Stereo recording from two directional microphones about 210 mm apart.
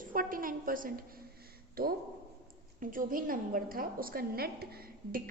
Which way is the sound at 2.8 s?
40° right (ahead or behind).